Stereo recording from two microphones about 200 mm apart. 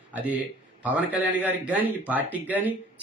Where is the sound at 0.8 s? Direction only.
5° right (ahead or behind).